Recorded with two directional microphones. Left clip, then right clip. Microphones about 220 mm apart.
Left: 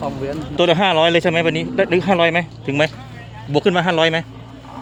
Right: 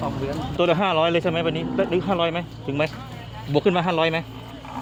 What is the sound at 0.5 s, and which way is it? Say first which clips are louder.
Speech: left 6 dB; 20° left (ahead or behind).